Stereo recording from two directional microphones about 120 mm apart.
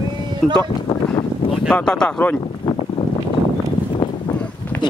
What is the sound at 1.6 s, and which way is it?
Speech, 5° left (ahead or behind).